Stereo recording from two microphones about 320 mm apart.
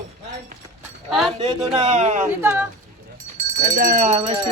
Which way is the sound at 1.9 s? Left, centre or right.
Right.